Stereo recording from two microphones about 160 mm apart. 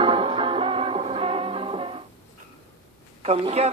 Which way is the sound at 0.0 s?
35° right (ahead or behind).